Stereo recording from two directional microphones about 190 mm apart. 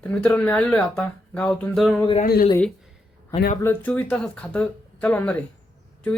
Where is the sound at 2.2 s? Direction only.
55° left (ahead or behind).